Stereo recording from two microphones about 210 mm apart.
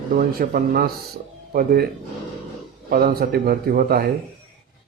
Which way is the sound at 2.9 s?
45° right (ahead or behind).